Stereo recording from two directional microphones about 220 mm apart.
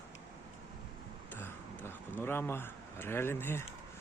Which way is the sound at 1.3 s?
10° left (ahead or behind).